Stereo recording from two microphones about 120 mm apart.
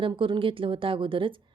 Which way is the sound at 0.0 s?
45° right (ahead or behind).